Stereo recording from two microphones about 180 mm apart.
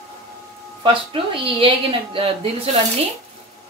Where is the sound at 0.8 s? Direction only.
30° right (ahead or behind).